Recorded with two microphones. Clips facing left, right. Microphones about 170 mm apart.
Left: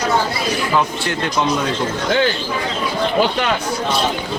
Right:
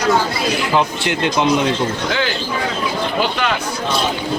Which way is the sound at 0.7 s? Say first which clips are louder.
Right 1 dB; 20° right (ahead or behind).